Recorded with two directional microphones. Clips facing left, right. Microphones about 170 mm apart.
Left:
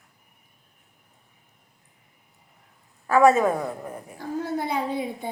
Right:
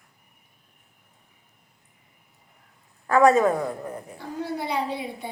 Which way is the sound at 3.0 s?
10° left (ahead or behind).